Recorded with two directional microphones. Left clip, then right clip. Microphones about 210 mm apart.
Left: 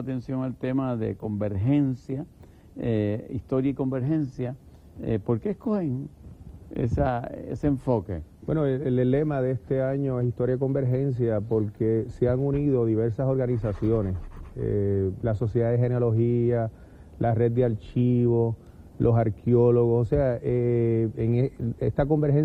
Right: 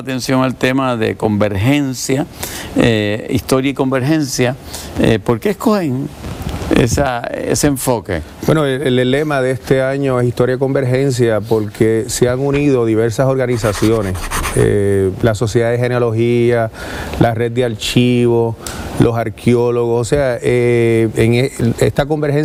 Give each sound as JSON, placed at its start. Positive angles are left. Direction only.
{"t": 0.1, "sound": "speech", "side_deg": -10}
{"t": 18.3, "sound": "speech", "side_deg": -35}
{"t": 18.9, "sound": "speech", "side_deg": -10}